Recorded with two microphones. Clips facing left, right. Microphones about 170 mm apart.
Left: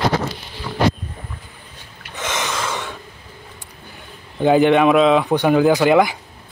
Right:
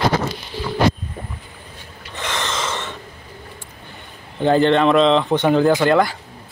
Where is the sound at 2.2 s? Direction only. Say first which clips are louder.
Left 1 dB; 15° left (ahead or behind).